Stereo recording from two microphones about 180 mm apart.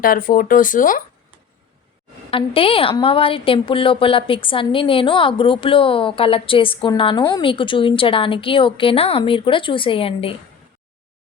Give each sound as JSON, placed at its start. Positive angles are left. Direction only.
{"t": 0.0, "sound": "speech", "side_deg": 50}
{"t": 2.3, "sound": "a woman's voice", "side_deg": 30}